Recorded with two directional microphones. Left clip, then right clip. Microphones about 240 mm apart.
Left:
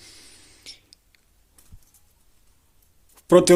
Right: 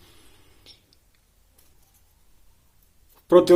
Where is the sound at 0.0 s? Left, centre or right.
Left.